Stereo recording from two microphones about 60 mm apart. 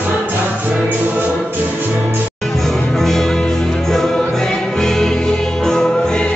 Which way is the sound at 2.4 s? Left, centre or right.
Centre.